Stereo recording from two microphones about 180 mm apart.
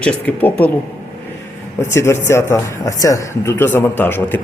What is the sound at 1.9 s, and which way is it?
Speech, 15° left (ahead or behind).